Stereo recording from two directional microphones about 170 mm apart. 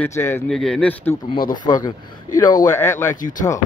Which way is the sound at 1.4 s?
50° left (ahead or behind).